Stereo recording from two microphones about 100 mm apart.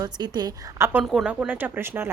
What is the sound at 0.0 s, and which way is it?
Speech, 45° right (ahead or behind).